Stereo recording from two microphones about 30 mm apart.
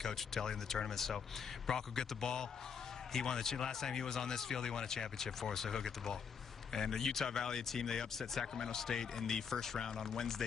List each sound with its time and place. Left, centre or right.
0.0 s a man's voice: centre